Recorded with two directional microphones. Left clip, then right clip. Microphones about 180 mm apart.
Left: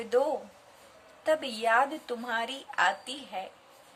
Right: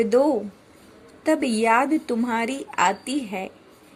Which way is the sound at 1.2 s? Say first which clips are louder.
Right 7 dB; 20° right (ahead or behind).